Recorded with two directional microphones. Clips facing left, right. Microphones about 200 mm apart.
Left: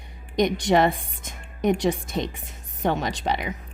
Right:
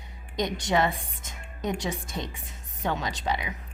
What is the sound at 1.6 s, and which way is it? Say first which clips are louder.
A woman's voice: left 8 dB; 55° left (ahead or behind).